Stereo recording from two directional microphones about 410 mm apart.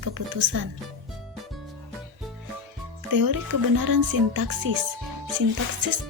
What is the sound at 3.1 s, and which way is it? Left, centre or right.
Speech, right.